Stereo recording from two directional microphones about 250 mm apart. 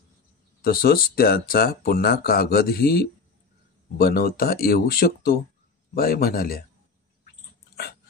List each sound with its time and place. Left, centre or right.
0.6 s speech: left
7.2 s dog: left